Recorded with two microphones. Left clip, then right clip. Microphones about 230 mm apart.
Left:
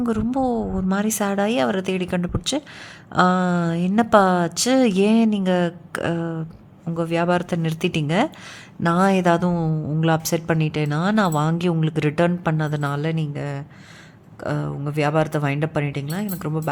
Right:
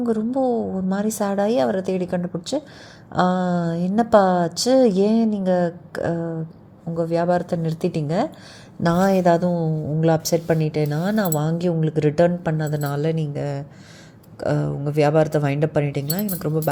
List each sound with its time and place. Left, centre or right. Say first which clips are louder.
0.0 s a woman's voice: right 1 dB; centre
9.5 s speech: right 1 dB; left
10.0 s a woman's voice: right 2 dB; centre